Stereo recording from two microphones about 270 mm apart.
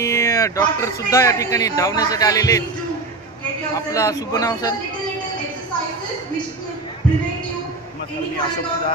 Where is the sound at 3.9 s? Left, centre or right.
Centre.